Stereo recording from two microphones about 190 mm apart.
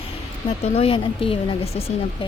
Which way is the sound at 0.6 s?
30° left (ahead or behind).